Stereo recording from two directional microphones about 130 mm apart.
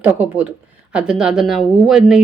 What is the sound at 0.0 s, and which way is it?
Speech, 15° right (ahead or behind).